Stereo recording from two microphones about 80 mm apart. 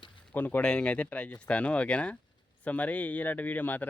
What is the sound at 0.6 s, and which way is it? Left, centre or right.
Speech, centre.